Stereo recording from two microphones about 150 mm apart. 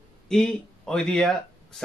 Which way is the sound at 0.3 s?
5° left (ahead or behind).